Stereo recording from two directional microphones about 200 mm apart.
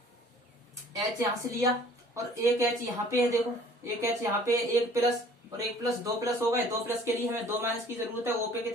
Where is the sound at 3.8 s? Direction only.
15° right (ahead or behind).